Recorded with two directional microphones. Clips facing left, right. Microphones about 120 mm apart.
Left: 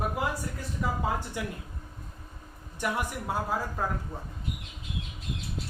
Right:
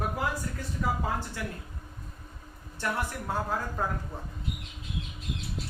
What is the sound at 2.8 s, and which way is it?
Speech, 15° left (ahead or behind).